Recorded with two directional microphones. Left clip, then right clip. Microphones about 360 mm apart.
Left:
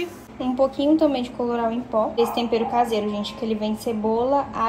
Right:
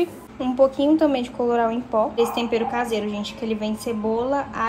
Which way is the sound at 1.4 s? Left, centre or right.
Centre.